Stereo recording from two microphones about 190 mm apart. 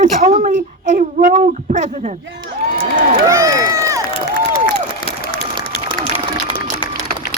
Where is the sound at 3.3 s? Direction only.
15° right (ahead or behind).